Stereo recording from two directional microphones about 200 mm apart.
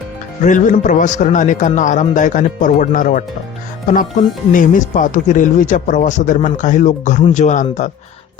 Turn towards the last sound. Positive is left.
turn(degrees=35)  # may be behind; listen again after turning